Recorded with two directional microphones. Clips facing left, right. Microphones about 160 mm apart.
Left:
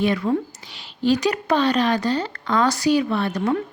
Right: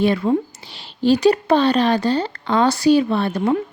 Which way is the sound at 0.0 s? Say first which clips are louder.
Right 3 dB; 30° right (ahead or behind).